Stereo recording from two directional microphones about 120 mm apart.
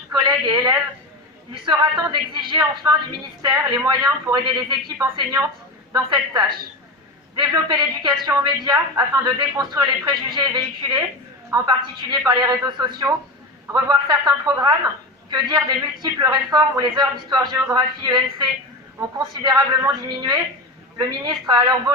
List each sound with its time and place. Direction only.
0.1 s a sound: 35° right (ahead or behind)
1.6 s a woman's voice: 35° right (ahead or behind)
4.9 s a woman's voice: 25° right (ahead or behind)